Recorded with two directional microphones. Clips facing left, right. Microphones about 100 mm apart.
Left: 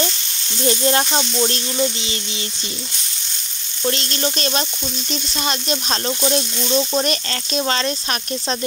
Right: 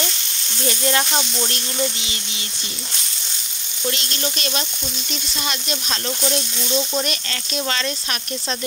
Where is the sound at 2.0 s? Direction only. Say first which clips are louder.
Left 5 dB; 30° left (ahead or behind).